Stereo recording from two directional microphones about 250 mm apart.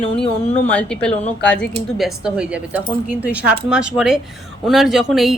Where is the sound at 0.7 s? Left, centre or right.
Centre.